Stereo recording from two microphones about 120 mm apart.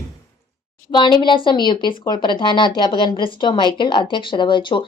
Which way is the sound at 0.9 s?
40° left (ahead or behind).